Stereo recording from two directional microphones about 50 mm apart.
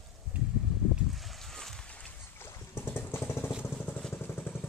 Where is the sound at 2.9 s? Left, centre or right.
Left.